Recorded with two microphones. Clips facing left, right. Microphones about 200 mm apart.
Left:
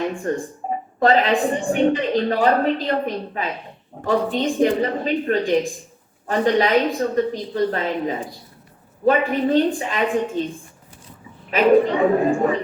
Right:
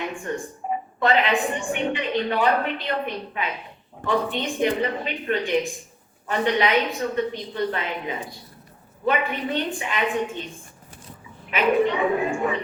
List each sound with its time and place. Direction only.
0.0 s a woman's voice: 35° left (ahead or behind)
11.5 s a woman's voice: 40° left (ahead or behind)